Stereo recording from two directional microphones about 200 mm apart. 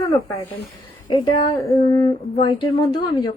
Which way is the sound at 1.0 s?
25° left (ahead or behind).